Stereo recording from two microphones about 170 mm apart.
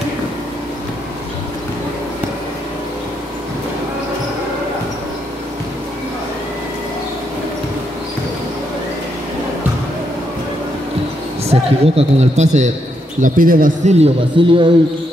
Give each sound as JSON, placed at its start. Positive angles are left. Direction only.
{"t": 11.4, "sound": "speech", "side_deg": -35}
{"t": 13.2, "sound": "a man's voice", "side_deg": -55}
{"t": 13.9, "sound": "a man's voice", "side_deg": -35}